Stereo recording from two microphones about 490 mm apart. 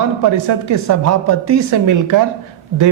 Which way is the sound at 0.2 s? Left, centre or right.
Right.